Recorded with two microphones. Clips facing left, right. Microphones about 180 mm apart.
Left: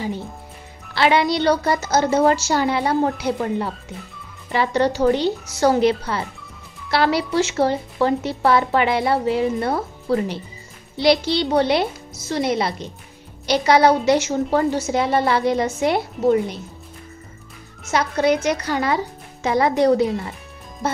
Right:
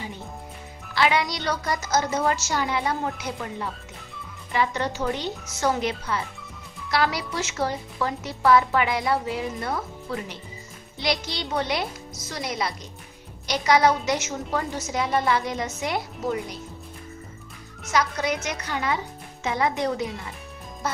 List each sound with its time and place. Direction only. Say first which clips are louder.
0.9 s a woman's voice: left 6 dB; 30° left (ahead or behind)
17.9 s a woman's voice: left 6 dB; 30° left (ahead or behind)